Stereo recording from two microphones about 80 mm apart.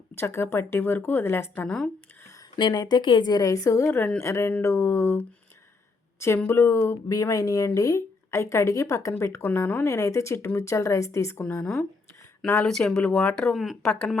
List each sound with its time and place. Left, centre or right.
0.1 s speech: left
1.6 s speech: centre
2.6 s speech: left
12.5 s speech: centre
13.5 s speech: centre